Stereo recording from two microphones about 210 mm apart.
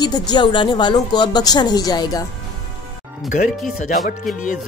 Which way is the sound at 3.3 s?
40° left (ahead or behind).